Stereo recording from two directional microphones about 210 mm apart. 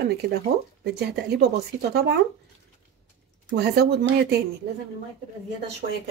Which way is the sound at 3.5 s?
50° right (ahead or behind).